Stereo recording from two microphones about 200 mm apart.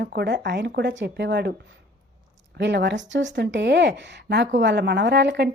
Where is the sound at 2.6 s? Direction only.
60° right (ahead or behind).